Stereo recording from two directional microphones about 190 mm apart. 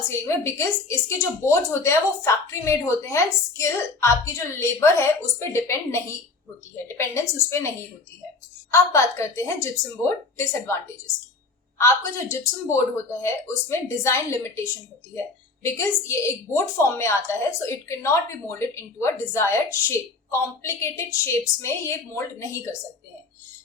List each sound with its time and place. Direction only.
0.1 s a woman's voice: 15° left (ahead or behind)
8.7 s a woman's voice: 15° left (ahead or behind)
11.8 s a woman's voice: 15° left (ahead or behind)